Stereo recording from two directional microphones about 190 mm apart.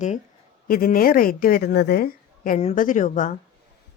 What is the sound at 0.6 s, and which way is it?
A woman's voice, 50° left (ahead or behind).